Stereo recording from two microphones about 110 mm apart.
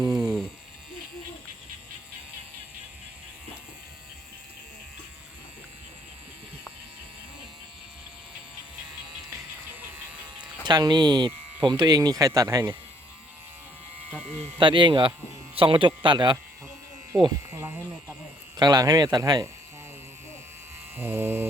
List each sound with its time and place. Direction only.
0.0 s a sound: 5° right (ahead or behind)
10.7 s speech: 40° right (ahead or behind)
14.1 s sheep: 10° left (ahead or behind)
14.6 s speech: 45° right (ahead or behind)
17.1 s speech: 5° left (ahead or behind)
17.5 s a sound: 25° right (ahead or behind)
18.5 s speech: 40° right (ahead or behind)
20.9 s mantra: 20° right (ahead or behind)